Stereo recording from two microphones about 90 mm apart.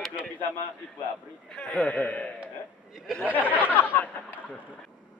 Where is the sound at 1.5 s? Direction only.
15° left (ahead or behind).